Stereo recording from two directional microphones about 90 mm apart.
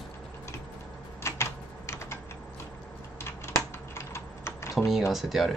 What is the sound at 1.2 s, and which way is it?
Typewriter, 30° left (ahead or behind).